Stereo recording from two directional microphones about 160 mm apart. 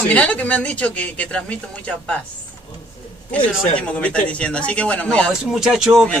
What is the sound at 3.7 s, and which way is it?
Speech, 10° left (ahead or behind).